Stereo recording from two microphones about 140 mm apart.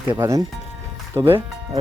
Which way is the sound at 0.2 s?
20° right (ahead or behind).